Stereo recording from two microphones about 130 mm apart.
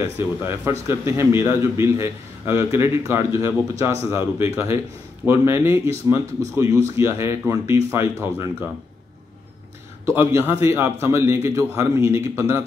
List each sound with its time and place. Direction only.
0.7 s a man's voice: 20° right (ahead or behind)
10.0 s a man's voice: 20° right (ahead or behind)